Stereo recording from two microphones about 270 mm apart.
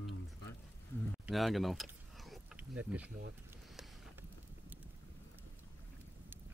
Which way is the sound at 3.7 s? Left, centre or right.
Centre.